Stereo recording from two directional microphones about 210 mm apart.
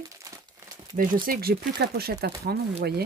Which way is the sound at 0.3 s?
15° right (ahead or behind).